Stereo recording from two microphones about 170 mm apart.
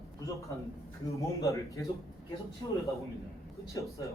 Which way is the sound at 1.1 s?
20° left (ahead or behind).